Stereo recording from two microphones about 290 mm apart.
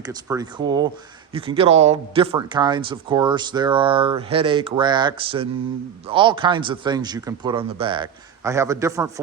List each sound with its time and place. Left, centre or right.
0.0 s speech: centre